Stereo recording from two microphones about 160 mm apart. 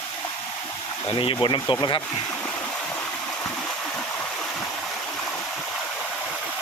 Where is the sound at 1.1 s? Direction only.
30° left (ahead or behind).